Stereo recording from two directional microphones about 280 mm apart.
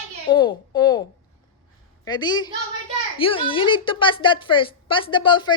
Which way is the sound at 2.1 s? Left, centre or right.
Centre.